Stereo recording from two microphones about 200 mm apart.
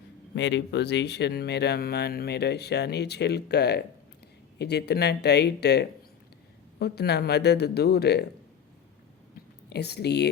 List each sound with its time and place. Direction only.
0.3 s speech: 60° left (ahead or behind)
9.6 s speech: 55° left (ahead or behind)